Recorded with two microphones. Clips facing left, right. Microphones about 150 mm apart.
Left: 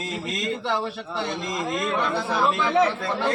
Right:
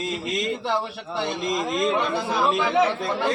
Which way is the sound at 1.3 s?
20° right (ahead or behind).